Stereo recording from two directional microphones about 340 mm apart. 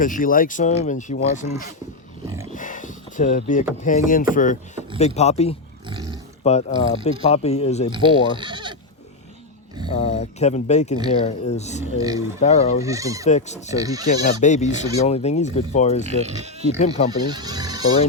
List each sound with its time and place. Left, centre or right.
0.0 s speech: left
7.9 s speech: centre
9.9 s speech: centre
12.8 s speech: centre
13.2 s speech: centre
13.7 s speech: centre
14.1 s speech: left
16.0 s speech: centre